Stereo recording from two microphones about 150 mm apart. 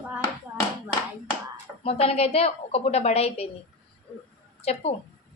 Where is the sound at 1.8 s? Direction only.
40° left (ahead or behind).